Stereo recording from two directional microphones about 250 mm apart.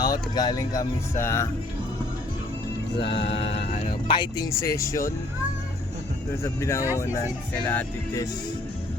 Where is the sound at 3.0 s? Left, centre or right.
Left.